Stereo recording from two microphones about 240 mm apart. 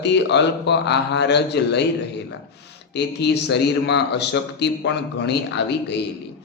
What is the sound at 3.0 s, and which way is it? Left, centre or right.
A man's voice, left.